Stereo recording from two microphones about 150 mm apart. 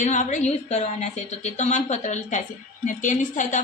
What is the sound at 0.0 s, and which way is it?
A woman's voice, 55° left (ahead or behind).